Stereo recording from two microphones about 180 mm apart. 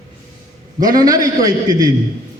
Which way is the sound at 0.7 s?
20° right (ahead or behind).